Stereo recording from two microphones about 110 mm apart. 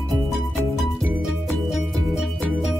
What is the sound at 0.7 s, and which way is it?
Music, centre (ahead or behind).